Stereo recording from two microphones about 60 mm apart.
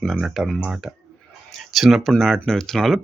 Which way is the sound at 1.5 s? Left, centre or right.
Centre.